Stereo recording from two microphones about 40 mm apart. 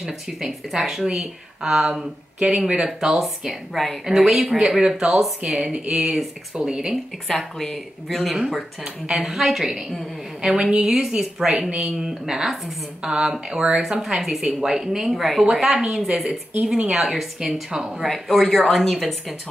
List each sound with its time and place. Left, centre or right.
0.0 s speech: centre
1.0 s a woman's voice: centre
3.1 s a woman's voice: centre
7.2 s speech: centre
8.4 s a woman's voice: centre
14.0 s a woman's voice: centre
18.0 s speech: centre